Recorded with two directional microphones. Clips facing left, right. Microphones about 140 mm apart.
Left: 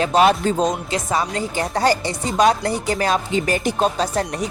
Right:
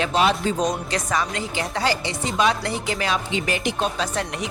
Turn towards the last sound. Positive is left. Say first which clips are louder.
# left 4 dB
turn(degrees=40)  # may be behind; listen again after turning